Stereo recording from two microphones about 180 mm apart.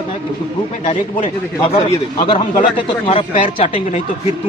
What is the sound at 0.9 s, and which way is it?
A man's voice, 30° left (ahead or behind).